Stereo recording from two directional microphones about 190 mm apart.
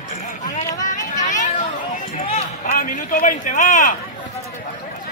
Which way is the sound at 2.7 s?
45° left (ahead or behind).